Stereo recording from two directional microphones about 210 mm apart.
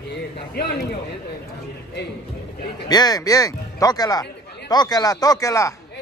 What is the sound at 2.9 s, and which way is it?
Speech, 20° left (ahead or behind).